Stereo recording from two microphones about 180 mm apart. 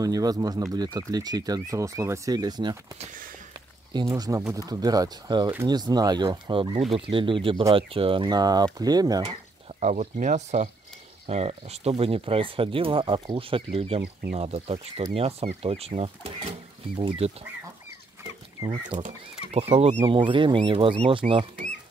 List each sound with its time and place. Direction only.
0.0 s speech: 20° right (ahead or behind)
3.0 s speech: 50° right (ahead or behind)
3.9 s speech: 20° right (ahead or behind)
9.2 s speech: 35° right (ahead or behind)
18.9 s speech: 45° right (ahead or behind)